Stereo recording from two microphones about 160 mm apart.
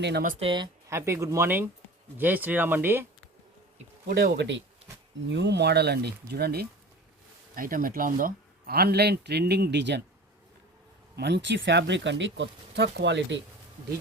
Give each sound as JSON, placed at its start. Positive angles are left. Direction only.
{"t": 0.0, "sound": "speech", "side_deg": -90}
{"t": 0.3, "sound": "speech", "side_deg": -30}
{"t": 0.9, "sound": "speech", "side_deg": -15}
{"t": 4.0, "sound": "speech", "side_deg": -90}
{"t": 7.5, "sound": "speech", "side_deg": -60}
{"t": 11.2, "sound": "speech", "side_deg": -90}